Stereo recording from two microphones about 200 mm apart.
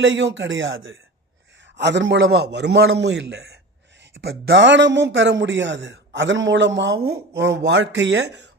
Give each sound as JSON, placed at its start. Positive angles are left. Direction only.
{"t": 0.0, "sound": "a man's voice", "side_deg": -70}